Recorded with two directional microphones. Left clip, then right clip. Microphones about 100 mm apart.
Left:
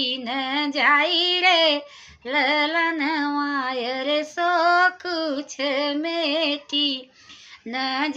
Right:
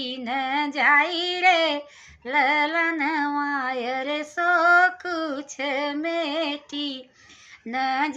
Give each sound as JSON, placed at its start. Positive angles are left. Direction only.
{"t": 0.0, "sound": "child singing", "side_deg": 15}
{"t": 2.2, "sound": "music", "side_deg": 20}
{"t": 7.7, "sound": "speech", "side_deg": 15}